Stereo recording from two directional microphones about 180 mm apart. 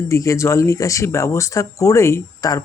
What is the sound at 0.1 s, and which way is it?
Speech, 15° left (ahead or behind).